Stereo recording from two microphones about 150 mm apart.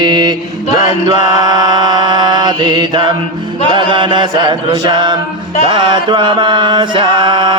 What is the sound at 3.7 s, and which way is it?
Chant, 30° right (ahead or behind).